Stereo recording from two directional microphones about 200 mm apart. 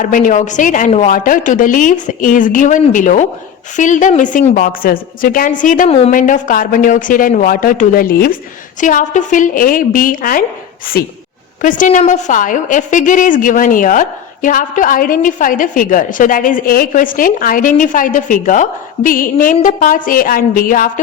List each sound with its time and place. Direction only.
0.0 s a woman's voice: 40° left (ahead or behind)